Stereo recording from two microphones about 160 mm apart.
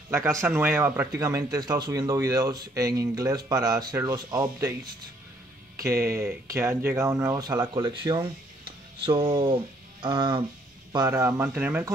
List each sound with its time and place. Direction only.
0.1 s speech: 15° right (ahead or behind)